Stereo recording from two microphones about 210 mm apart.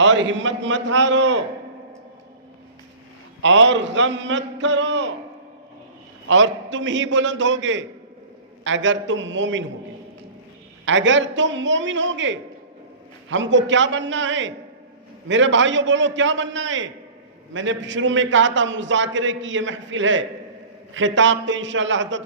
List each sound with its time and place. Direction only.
0.0 s a man's voice: 60° right (ahead or behind)
3.4 s a man's voice: 65° right (ahead or behind)
6.2 s a man's voice: 65° right (ahead or behind)
10.8 s a man's voice: 65° right (ahead or behind)